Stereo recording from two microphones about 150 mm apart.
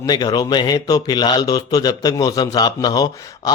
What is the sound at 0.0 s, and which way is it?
Speech, 25° left (ahead or behind).